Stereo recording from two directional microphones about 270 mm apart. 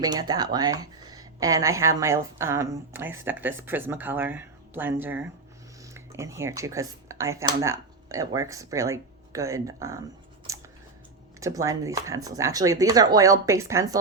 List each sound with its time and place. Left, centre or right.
0.0 s speech: centre
10.5 s scissors: centre
11.3 s speech: centre